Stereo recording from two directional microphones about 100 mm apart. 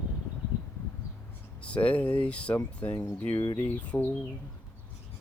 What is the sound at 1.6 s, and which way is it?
Speech, 15° left (ahead or behind).